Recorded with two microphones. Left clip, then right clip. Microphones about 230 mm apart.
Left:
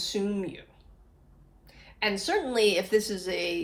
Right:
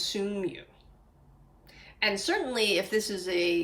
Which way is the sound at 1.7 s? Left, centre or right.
Centre.